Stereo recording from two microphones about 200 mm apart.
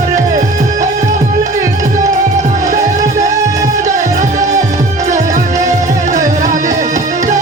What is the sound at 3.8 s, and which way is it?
Music, 35° right (ahead or behind).